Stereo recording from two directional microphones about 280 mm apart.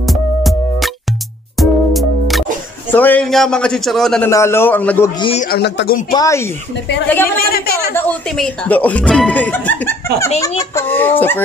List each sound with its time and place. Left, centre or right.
0.0 s music: centre
2.9 s a man's voice: centre
5.3 s a man's voice: left
6.1 s a man's voice: centre
7.3 s a man's voice: left
7.9 s a man's voice: centre